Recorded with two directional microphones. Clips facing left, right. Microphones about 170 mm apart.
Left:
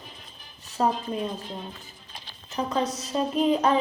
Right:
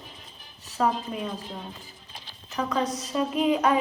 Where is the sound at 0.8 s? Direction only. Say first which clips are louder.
Even; 25° left (ahead or behind).